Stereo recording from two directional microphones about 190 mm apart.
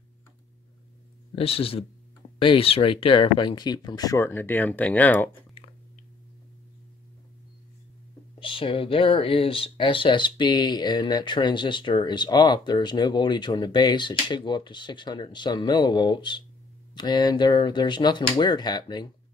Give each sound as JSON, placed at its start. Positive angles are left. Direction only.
{"t": 1.3, "sound": "speech", "side_deg": 30}
{"t": 5.6, "sound": "a sound", "side_deg": 30}
{"t": 8.4, "sound": "speech", "side_deg": 30}